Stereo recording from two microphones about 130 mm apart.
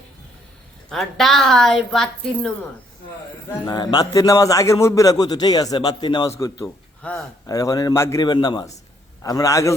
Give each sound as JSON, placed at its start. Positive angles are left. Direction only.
{"t": 0.9, "sound": "a woman's voice", "side_deg": 0}
{"t": 3.7, "sound": "a man's voice", "side_deg": 30}
{"t": 7.0, "sound": "speech", "side_deg": 5}
{"t": 7.4, "sound": "a man's voice", "side_deg": 25}
{"t": 8.2, "sound": "a man's voice", "side_deg": 35}